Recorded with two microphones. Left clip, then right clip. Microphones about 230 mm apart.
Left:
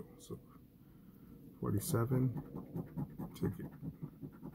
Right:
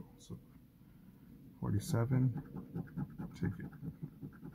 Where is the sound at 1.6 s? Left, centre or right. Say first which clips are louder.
Left 2 dB; right.